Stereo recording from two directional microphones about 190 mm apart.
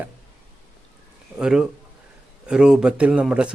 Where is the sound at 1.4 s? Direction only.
5° right (ahead or behind).